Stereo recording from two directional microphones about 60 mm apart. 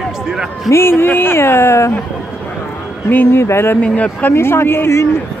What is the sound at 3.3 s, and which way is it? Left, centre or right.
Speech, left.